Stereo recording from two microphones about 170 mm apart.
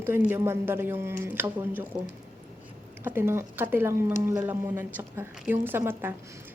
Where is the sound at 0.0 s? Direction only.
10° right (ahead or behind).